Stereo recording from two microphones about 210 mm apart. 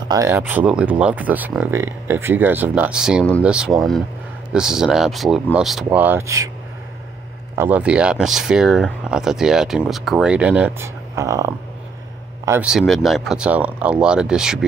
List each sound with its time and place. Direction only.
0.1 s speech: 15° right (ahead or behind)
7.5 s speech: 10° right (ahead or behind)